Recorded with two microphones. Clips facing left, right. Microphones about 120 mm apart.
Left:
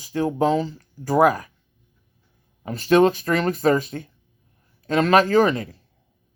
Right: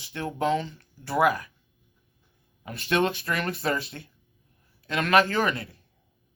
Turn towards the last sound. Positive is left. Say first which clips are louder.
# left 9 dB
turn(degrees=35)  # may be behind; listen again after turning